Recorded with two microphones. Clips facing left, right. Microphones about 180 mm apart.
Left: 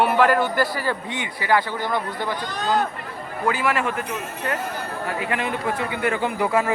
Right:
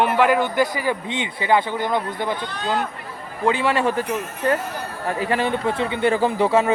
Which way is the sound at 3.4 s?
25° right (ahead or behind).